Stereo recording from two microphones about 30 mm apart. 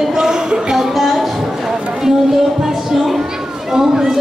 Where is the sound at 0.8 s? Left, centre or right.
Centre.